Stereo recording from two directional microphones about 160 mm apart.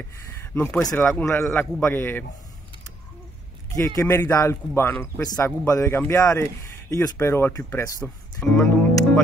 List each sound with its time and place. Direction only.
0.4 s speech: 10° left (ahead or behind)
3.7 s speech: 15° left (ahead or behind)
5.2 s a man's voice: 25° left (ahead or behind)
8.0 s speech: 5° left (ahead or behind)